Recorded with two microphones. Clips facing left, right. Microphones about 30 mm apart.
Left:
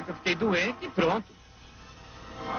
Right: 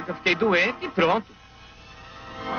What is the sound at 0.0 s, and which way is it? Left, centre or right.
Speech, right.